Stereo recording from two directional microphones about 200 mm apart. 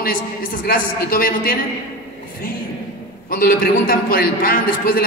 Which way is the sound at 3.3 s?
45° left (ahead or behind).